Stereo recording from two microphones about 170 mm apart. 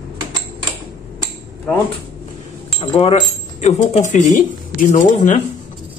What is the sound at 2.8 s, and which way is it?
Speech, 35° left (ahead or behind).